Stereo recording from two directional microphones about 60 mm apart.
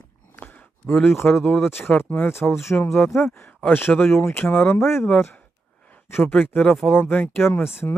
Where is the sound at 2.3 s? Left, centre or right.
Left.